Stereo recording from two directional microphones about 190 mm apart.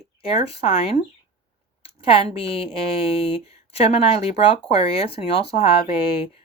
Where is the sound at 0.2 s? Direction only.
30° left (ahead or behind).